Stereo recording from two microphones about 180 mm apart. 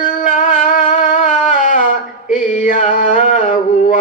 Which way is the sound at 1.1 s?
45° left (ahead or behind).